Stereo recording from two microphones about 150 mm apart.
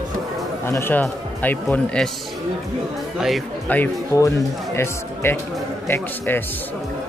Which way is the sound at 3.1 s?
Centre (ahead or behind).